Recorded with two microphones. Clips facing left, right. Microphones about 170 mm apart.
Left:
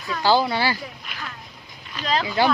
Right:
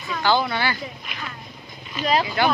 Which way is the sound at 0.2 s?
35° left (ahead or behind).